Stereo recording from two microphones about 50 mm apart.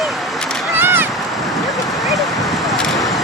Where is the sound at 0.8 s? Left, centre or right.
Right.